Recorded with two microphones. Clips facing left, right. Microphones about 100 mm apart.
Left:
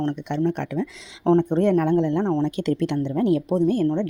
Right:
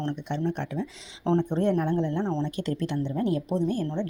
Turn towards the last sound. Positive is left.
turn(degrees=60)  # may be behind; listen again after turning